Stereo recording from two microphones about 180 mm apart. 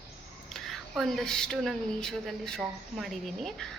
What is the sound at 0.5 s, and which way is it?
A woman's voice, centre (ahead or behind).